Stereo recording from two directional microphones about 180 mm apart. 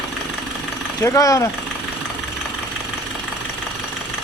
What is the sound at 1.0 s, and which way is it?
Speech, 15° left (ahead or behind).